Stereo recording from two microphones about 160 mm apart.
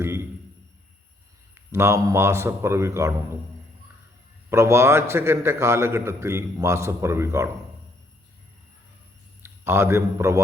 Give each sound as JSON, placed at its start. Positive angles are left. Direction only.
{"t": 0.0, "sound": "a sound", "side_deg": -15}
{"t": 1.5, "sound": "a man's voice", "side_deg": -15}
{"t": 4.4, "sound": "a man's voice", "side_deg": -15}
{"t": 9.4, "sound": "a man's voice", "side_deg": -15}